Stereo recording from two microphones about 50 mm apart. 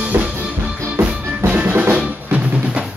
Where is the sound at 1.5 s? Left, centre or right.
Right.